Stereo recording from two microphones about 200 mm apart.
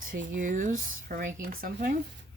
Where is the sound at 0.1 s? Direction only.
40° right (ahead or behind).